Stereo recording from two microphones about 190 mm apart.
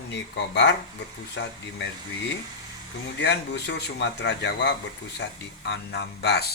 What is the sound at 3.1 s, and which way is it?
Speech, 65° left (ahead or behind).